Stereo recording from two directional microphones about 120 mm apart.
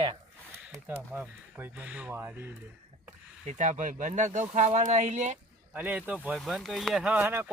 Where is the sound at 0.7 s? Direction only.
15° right (ahead or behind).